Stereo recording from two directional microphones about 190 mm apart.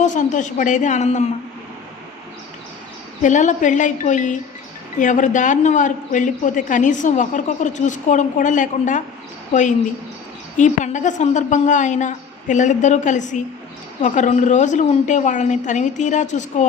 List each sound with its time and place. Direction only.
0.0 s a man's voice: 40° left (ahead or behind)
3.2 s a man's voice: 40° left (ahead or behind)